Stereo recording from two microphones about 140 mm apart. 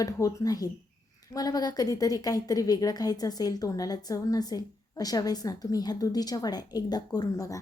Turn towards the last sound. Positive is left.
turn(degrees=25)  # may be behind; listen again after turning